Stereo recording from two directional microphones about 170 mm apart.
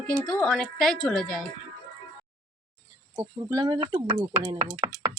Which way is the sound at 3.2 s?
20° right (ahead or behind).